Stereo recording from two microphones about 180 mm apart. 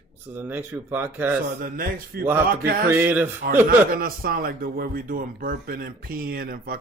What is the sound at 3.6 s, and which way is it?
Speech, 55° right (ahead or behind).